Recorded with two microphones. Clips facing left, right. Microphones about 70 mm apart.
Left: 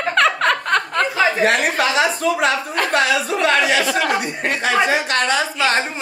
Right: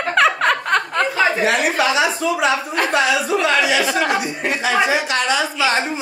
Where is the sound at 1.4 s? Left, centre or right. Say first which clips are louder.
Even; left.